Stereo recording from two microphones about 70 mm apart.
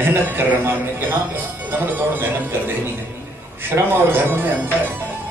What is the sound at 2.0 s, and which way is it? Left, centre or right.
Speech, right.